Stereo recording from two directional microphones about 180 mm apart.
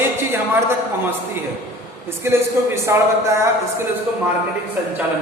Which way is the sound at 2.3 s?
15° right (ahead or behind).